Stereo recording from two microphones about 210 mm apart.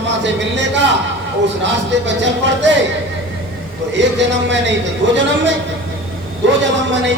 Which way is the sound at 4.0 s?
60° right (ahead or behind).